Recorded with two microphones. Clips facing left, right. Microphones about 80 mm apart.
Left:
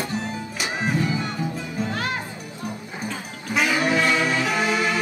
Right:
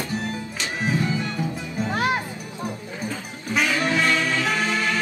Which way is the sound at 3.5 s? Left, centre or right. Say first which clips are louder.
Left 1 dB; centre.